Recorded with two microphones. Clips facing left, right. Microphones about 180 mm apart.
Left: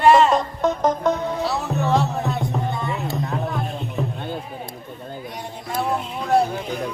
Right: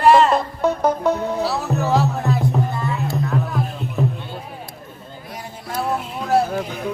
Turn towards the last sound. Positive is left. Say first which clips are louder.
# right 1 dB
turn(degrees=0)  # may be behind; listen again after turning